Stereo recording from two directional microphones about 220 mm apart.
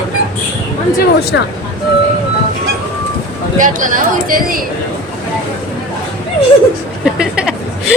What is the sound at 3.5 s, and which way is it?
Speech, 35° right (ahead or behind).